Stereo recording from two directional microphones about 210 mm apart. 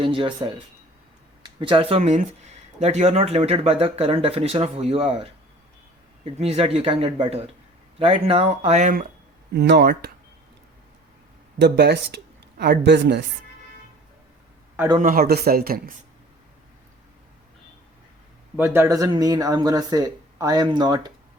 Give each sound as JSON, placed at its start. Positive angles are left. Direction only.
{"t": 0.0, "sound": "speech", "side_deg": -25}
{"t": 6.4, "sound": "speech", "side_deg": -30}
{"t": 9.5, "sound": "speech", "side_deg": -55}
{"t": 11.6, "sound": "a woman's voice", "side_deg": -50}
{"t": 15.0, "sound": "speech", "side_deg": -45}
{"t": 18.5, "sound": "speech", "side_deg": -10}